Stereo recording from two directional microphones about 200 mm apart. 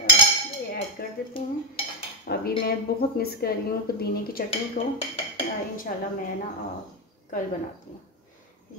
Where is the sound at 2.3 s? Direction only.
50° left (ahead or behind).